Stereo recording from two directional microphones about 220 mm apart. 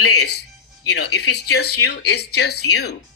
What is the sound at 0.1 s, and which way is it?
Speech, 90° left.